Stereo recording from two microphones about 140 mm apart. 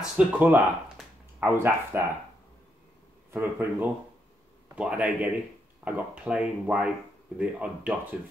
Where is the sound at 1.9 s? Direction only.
15° right (ahead or behind).